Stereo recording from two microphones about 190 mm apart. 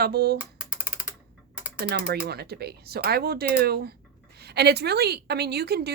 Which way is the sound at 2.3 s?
55° right (ahead or behind).